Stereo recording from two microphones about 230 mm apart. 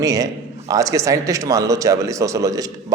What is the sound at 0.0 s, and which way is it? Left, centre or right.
A man's voice, centre.